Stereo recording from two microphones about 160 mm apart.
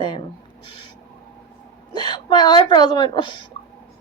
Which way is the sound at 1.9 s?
25° left (ahead or behind).